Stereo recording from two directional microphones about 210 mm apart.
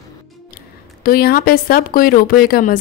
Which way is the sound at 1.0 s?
45° left (ahead or behind).